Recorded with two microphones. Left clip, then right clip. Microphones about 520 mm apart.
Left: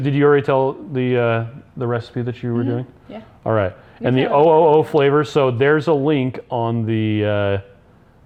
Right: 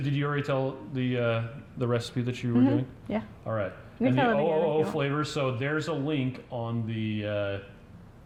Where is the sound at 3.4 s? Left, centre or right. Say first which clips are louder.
Left 18 dB; left.